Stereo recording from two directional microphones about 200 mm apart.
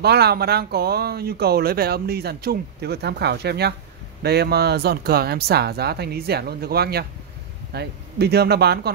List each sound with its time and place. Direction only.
0.0 s speech: 55° right (ahead or behind)